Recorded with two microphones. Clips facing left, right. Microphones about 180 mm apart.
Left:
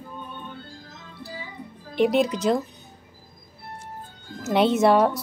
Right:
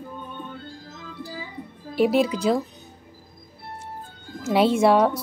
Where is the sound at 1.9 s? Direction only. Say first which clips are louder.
Right 1 dB; 5° right (ahead or behind).